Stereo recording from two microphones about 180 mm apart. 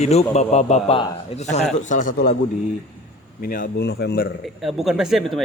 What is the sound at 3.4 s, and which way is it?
Speech, 50° left (ahead or behind).